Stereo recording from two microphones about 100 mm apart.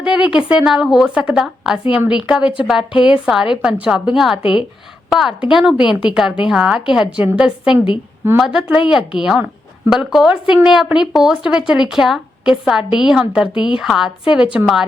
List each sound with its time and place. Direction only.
0.0 s a woman's voice: 10° right (ahead or behind)
13.5 s a woman's voice: 55° left (ahead or behind)
13.7 s a woman's voice: 5° right (ahead or behind)